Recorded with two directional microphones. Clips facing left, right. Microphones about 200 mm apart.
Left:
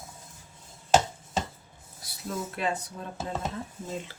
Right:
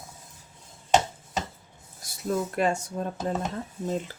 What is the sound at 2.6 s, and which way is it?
Speech, 45° right (ahead or behind).